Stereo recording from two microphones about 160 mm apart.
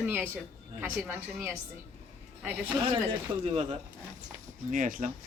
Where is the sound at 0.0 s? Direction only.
10° right (ahead or behind).